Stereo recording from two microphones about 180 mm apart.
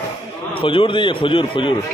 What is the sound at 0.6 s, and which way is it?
A man's voice, 30° left (ahead or behind).